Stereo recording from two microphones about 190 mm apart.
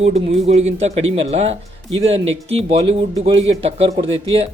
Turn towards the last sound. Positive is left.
turn(degrees=-30)  # may be behind; listen again after turning